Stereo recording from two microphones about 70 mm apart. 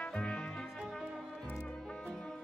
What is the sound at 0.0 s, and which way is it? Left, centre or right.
Music, centre.